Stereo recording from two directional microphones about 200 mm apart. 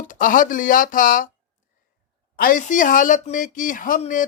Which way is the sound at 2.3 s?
45° left (ahead or behind).